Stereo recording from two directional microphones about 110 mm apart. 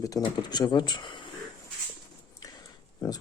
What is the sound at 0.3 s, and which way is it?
Speech, 40° left (ahead or behind).